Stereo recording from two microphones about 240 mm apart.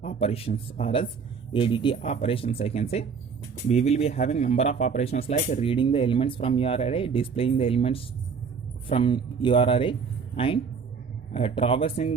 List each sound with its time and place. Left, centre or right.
0.0 s speech: left